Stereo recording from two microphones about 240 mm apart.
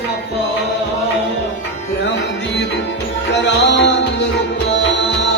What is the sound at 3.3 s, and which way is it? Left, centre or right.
Music, left.